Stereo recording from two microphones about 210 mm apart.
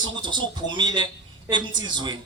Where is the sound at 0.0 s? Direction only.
20° right (ahead or behind).